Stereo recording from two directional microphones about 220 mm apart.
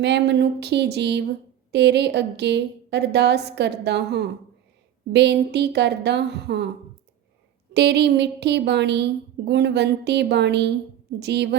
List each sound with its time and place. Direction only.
0.0 s a woman's voice: 50° right (ahead or behind)
7.7 s a woman's voice: 50° right (ahead or behind)